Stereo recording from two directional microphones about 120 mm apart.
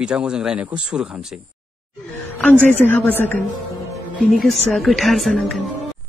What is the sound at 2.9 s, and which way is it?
Speech, 15° left (ahead or behind).